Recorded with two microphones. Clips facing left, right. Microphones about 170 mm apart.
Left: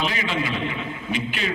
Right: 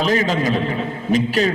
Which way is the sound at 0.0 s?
40° right (ahead or behind).